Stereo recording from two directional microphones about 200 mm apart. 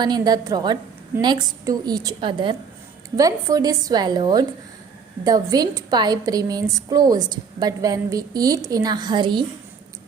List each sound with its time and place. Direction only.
0.0 s a woman's voice: 20° right (ahead or behind)